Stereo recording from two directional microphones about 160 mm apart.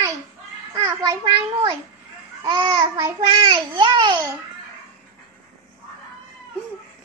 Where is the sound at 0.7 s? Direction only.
25° right (ahead or behind).